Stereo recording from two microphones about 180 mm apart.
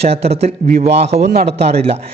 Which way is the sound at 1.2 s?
65° right (ahead or behind).